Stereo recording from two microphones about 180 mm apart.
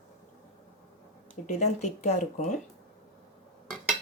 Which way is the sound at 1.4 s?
40° left (ahead or behind).